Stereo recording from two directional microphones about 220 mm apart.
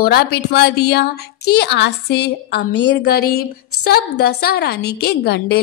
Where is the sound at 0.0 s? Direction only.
45° left (ahead or behind).